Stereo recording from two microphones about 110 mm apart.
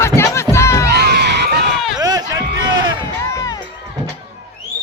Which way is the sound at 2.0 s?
35° right (ahead or behind).